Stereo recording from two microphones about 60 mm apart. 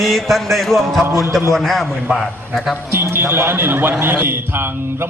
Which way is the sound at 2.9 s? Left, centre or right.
Right.